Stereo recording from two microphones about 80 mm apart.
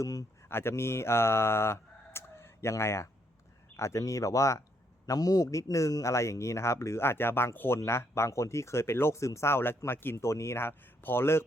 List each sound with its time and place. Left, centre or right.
0.0 s speech: left
0.4 s a sound: left
3.8 s speech: left